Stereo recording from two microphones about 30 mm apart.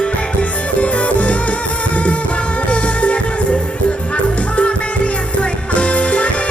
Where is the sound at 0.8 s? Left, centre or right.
Left.